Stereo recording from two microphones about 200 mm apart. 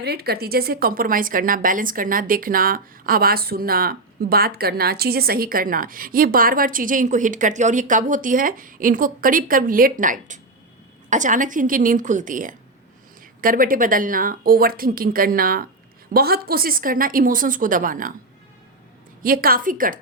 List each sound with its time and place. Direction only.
0.0 s a woman's voice: 50° right (ahead or behind)
19.2 s a woman's voice: 45° right (ahead or behind)